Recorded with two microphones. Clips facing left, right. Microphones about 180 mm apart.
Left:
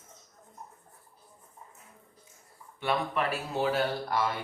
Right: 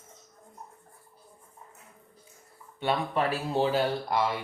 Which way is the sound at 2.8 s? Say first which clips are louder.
Right 2 dB; 30° right (ahead or behind).